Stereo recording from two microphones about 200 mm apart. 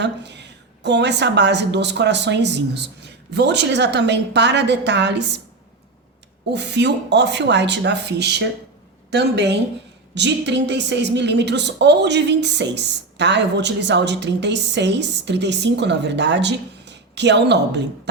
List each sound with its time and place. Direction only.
0.0 s a woman's voice: 60° right (ahead or behind)
6.5 s a woman's voice: 60° right (ahead or behind)